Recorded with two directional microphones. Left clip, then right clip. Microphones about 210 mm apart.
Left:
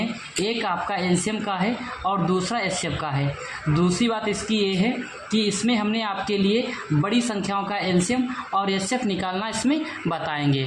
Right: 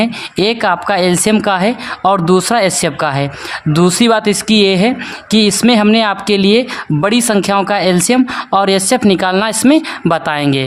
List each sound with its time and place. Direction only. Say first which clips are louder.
0.0 s speech: right 13 dB; 50° right (ahead or behind)